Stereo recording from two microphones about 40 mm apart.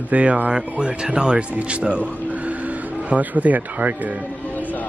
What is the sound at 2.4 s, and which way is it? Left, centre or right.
Speech, right.